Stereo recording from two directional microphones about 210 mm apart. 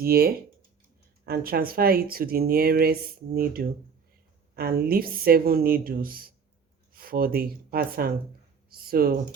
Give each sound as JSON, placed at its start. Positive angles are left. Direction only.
{"t": 0.0, "sound": "speech", "side_deg": -45}